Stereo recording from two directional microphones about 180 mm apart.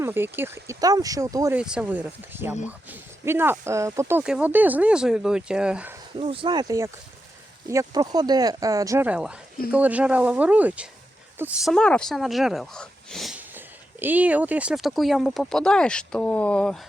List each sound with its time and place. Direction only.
0.0 s speech: 10° right (ahead or behind)
1.5 s speech: 5° right (ahead or behind)
4.2 s speech: 5° right (ahead or behind)
6.1 s speech: 30° right (ahead or behind)
9.0 s speech: 5° right (ahead or behind)